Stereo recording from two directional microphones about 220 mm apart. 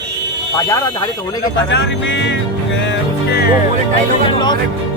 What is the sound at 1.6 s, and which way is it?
Speech, 55° left (ahead or behind).